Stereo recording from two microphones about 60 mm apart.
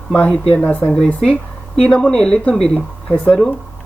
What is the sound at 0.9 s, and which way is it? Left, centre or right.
Speech, centre.